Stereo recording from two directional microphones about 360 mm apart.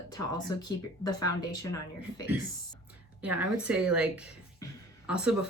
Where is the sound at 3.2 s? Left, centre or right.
Centre.